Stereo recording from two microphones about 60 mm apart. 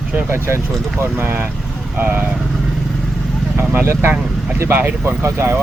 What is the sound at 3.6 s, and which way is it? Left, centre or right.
Speech, right.